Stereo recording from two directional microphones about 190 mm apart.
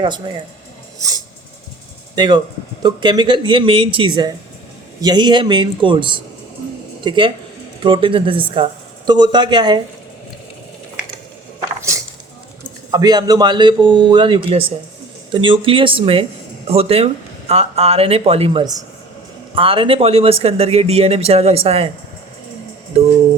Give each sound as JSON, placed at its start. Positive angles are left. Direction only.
{"t": 0.3, "sound": "speech", "side_deg": -25}
{"t": 2.1, "sound": "speech", "side_deg": -25}
{"t": 12.9, "sound": "speech", "side_deg": -20}
{"t": 22.9, "sound": "speech", "side_deg": -30}